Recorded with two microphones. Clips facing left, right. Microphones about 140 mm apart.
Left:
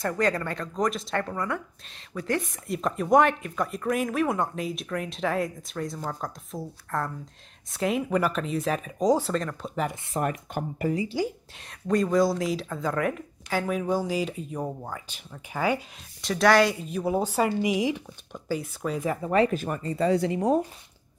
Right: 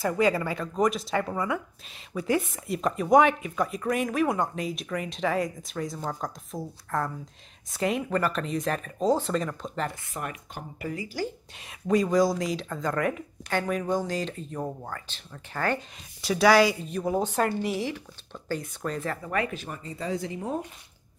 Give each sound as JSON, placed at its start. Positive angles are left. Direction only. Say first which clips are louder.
{"t": 0.0, "sound": "speech", "louder": "right 2 dB", "side_deg": -5}
{"t": 10.1, "sound": "speech", "louder": "left 8 dB", "side_deg": 40}
{"t": 10.9, "sound": "speech", "louder": "left 6 dB", "side_deg": 25}
{"t": 11.5, "sound": "speech", "louder": "right 2 dB", "side_deg": 0}
{"t": 16.2, "sound": "a woman's voice", "louder": "even", "side_deg": -5}
{"t": 19.5, "sound": "speech", "louder": "left 8 dB", "side_deg": 55}